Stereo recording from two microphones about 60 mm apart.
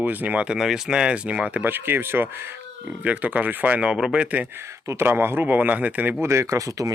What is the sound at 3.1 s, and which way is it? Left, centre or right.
Speech, right.